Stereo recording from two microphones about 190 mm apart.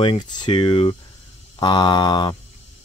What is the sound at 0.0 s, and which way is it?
Speech, 25° left (ahead or behind).